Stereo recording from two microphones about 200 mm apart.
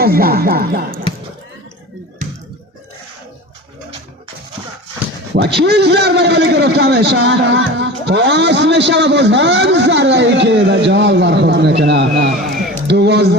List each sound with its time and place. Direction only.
0.0 s a woman's voice: 50° right (ahead or behind)
5.3 s a man's voice: 55° right (ahead or behind)